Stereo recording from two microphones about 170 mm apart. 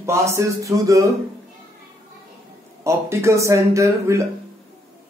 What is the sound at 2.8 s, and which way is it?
A man's voice, 15° right (ahead or behind).